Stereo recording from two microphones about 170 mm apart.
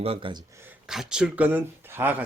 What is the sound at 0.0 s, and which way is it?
Speech, 30° right (ahead or behind).